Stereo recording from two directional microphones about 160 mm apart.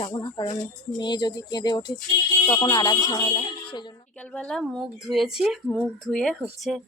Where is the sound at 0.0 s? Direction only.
25° left (ahead or behind).